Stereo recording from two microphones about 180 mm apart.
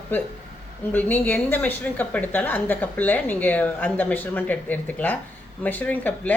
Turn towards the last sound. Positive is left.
turn(degrees=10)  # may be behind; listen again after turning